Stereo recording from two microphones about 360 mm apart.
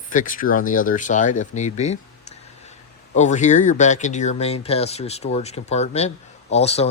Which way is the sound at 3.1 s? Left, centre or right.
Centre.